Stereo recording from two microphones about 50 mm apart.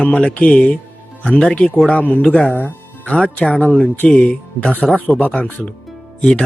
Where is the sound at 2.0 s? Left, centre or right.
Left.